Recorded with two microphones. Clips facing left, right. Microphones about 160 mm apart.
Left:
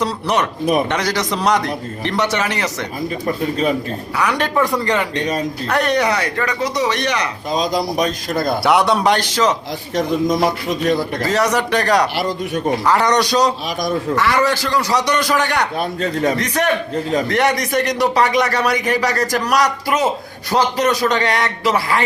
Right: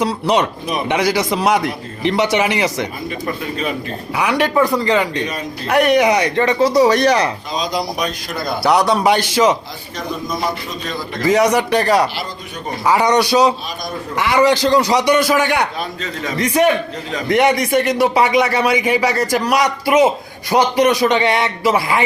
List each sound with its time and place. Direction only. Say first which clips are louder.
0.0 s speech: right 3 dB; 10° right (ahead or behind)
4.2 s speech: right 2 dB; 10° right (ahead or behind); by 7.3 s 35° right (ahead or behind)
7.6 s a man's voice: left 2 dB; 45° left (ahead or behind)
8.6 s speech: right 2 dB; centre (ahead or behind)
11.3 s speech: right 5 dB; 10° right (ahead or behind)
16.0 s a man's voice: left 7 dB; 50° left (ahead or behind)
16.4 s speech: right 4 dB; 10° right (ahead or behind)